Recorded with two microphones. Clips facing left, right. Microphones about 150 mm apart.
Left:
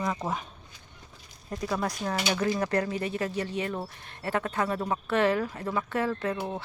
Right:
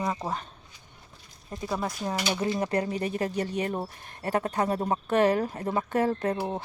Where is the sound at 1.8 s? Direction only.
15° right (ahead or behind).